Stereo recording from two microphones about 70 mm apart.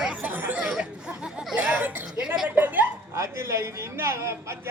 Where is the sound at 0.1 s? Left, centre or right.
Right.